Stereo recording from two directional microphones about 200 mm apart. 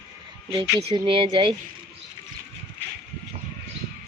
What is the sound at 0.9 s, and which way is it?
Speech, 25° right (ahead or behind).